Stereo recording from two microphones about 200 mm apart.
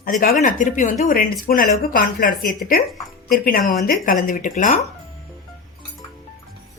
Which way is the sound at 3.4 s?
45° left (ahead or behind).